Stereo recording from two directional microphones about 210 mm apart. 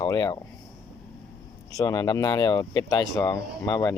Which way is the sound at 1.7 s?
20° left (ahead or behind).